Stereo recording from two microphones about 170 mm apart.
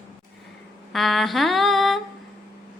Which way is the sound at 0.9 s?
Centre (ahead or behind).